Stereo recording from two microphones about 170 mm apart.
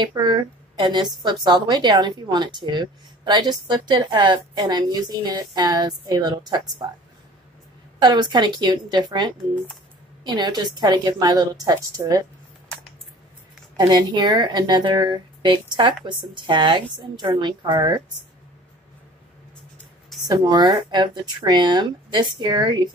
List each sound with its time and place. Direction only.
0.0 s a woman's voice: 25° right (ahead or behind)
8.0 s a woman's voice: 25° right (ahead or behind)
13.7 s a woman's voice: 25° right (ahead or behind)
20.2 s a woman's voice: 25° right (ahead or behind)